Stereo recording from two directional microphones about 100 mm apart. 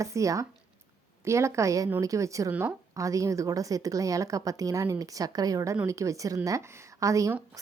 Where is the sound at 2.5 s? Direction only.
20° right (ahead or behind).